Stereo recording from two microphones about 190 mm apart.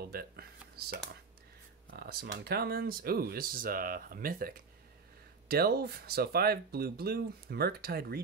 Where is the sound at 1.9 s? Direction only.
50° right (ahead or behind).